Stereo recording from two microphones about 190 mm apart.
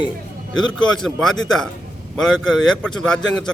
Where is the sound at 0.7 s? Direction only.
5° left (ahead or behind).